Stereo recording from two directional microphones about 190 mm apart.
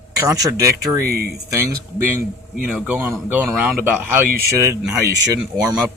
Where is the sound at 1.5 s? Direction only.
15° right (ahead or behind).